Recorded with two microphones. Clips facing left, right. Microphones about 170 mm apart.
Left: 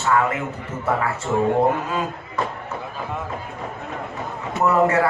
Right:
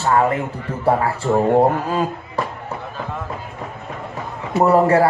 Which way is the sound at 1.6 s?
30° right (ahead or behind).